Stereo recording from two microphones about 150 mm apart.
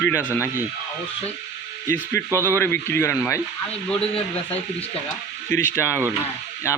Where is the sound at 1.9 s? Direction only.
15° left (ahead or behind).